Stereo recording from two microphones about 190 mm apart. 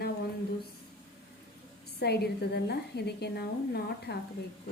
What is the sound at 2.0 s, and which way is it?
A woman's voice, 60° left (ahead or behind).